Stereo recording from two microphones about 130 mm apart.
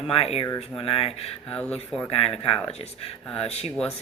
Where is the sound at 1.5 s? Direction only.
5° left (ahead or behind).